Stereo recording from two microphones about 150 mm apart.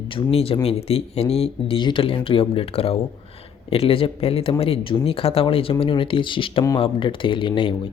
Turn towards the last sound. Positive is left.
turn(degrees=30)  # may be behind; listen again after turning